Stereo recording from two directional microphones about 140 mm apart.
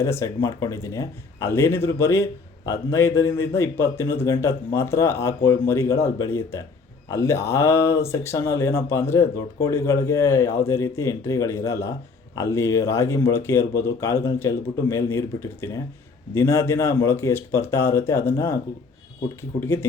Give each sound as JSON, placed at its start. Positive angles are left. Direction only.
{"t": 0.0, "sound": "speech", "side_deg": 20}